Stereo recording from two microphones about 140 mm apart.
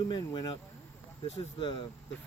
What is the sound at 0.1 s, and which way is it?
Speech, 35° left (ahead or behind).